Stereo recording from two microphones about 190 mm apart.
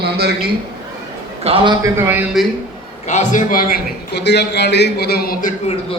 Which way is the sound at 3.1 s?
40° left (ahead or behind).